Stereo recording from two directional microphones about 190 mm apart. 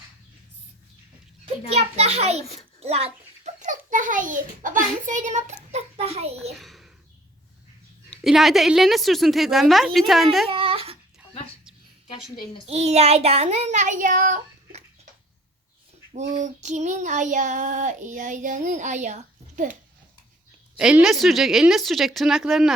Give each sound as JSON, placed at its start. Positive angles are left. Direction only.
{"t": 1.7, "sound": "child singing", "side_deg": -35}
{"t": 2.8, "sound": "a child's voice", "side_deg": -35}
{"t": 6.6, "sound": "a sound", "side_deg": 0}
{"t": 8.1, "sound": "a woman's voice", "side_deg": 0}
{"t": 10.5, "sound": "a sound", "side_deg": -30}
{"t": 12.6, "sound": "child singing", "side_deg": -35}
{"t": 16.1, "sound": "child singing", "side_deg": -40}
{"t": 20.7, "sound": "a woman's voice", "side_deg": -5}